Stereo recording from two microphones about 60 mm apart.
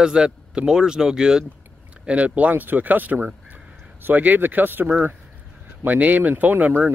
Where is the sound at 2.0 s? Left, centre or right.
Right.